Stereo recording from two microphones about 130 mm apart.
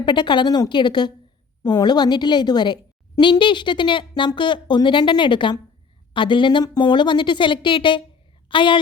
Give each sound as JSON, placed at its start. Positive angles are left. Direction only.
{"t": 0.0, "sound": "a woman's voice", "side_deg": 35}